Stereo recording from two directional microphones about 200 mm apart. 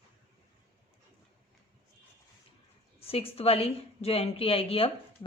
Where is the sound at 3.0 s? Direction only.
30° left (ahead or behind).